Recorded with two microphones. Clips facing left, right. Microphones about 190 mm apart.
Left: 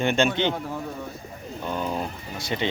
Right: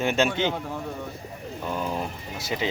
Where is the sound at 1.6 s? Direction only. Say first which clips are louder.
Left 1 dB; 5° right (ahead or behind).